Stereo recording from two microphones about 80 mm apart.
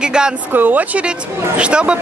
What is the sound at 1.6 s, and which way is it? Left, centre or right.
Speech, centre.